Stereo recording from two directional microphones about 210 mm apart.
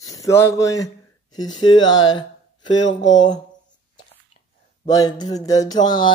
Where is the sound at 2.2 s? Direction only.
20° left (ahead or behind).